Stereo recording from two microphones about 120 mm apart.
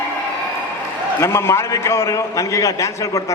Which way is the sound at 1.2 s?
25° left (ahead or behind).